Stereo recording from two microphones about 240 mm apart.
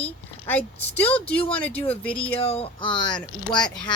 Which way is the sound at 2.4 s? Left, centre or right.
Left.